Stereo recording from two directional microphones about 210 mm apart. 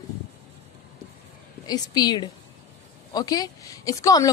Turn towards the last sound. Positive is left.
turn(degrees=15)  # may be behind; listen again after turning